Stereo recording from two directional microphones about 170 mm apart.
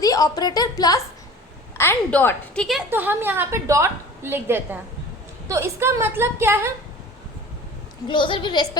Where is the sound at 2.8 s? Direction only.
10° right (ahead or behind).